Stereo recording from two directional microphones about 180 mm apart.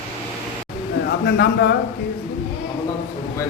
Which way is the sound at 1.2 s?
65° left (ahead or behind).